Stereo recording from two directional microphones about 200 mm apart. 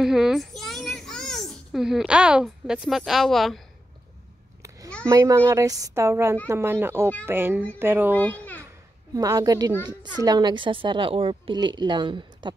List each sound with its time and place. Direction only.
0.0 s a child's voice: centre (ahead or behind)
4.6 s a sound: 15° right (ahead or behind)
5.0 s a woman's voice: 15° right (ahead or behind)
8.2 s a child's voice: 10° left (ahead or behind)
9.1 s a woman's voice: 15° right (ahead or behind)